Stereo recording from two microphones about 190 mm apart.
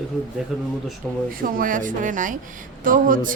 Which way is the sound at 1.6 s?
45° right (ahead or behind).